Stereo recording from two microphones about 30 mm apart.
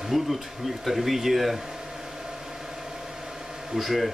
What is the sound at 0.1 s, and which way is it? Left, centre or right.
Speech, centre.